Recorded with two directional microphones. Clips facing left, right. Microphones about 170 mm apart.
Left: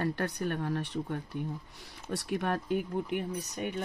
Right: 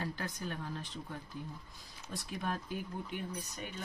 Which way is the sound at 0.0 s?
65° left (ahead or behind).